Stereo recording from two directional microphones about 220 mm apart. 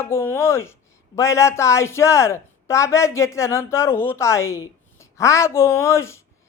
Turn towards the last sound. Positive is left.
turn(degrees=10)  # may be behind; listen again after turning